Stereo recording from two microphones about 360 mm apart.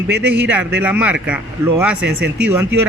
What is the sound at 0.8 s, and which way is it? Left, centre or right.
Speech, centre.